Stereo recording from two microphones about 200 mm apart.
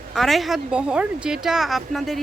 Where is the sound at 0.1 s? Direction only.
Centre (ahead or behind).